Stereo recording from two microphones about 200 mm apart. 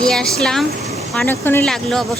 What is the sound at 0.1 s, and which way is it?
Speech, centre (ahead or behind).